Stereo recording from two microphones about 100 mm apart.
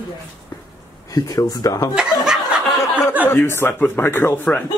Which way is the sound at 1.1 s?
35° left (ahead or behind).